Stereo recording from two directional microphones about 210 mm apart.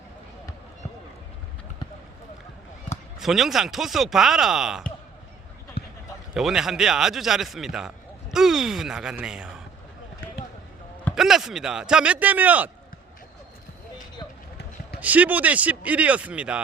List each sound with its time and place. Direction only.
3.2 s a man's voice: centre (ahead or behind)
5.8 s a sound: 50° left (ahead or behind)
6.3 s a man's voice: centre (ahead or behind)
11.1 s a man's voice: centre (ahead or behind)
14.2 s a sound: 20° left (ahead or behind)
15.0 s a man's voice: 5° right (ahead or behind)